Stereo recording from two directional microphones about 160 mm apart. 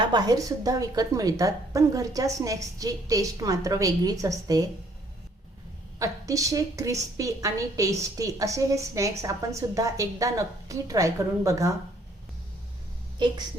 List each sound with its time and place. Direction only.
0.0 s a woman's voice: 25° right (ahead or behind)
6.0 s a woman's voice: 20° right (ahead or behind)